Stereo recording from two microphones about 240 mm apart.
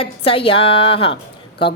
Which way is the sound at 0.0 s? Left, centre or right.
Left.